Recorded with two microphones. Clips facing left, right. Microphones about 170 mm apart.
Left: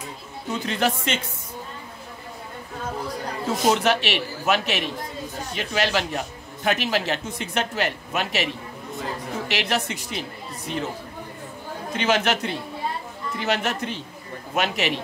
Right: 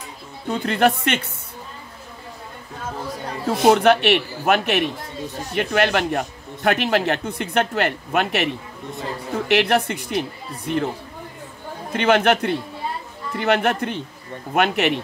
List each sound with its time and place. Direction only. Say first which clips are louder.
0.5 s a man's voice: right 5 dB; 60° right (ahead or behind)
3.4 s a man's voice: right 6 dB; 55° right (ahead or behind)
9.5 s a man's voice: right 8 dB; 55° right (ahead or behind)
11.9 s a man's voice: right 5 dB; 55° right (ahead or behind)